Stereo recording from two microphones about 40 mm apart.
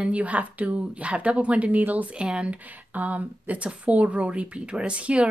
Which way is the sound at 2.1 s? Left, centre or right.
Right.